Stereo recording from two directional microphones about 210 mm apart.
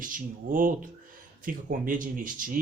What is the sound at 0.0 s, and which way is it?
Speech, 40° right (ahead or behind).